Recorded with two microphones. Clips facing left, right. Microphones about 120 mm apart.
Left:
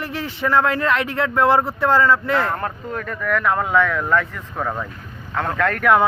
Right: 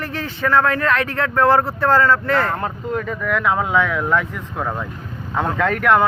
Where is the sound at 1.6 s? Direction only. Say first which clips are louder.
Right 1 dB; centre (ahead or behind).